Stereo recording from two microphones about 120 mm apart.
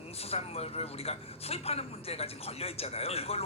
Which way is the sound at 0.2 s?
55° left (ahead or behind).